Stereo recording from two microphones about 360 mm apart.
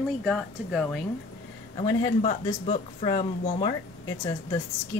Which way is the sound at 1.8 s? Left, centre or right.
Centre.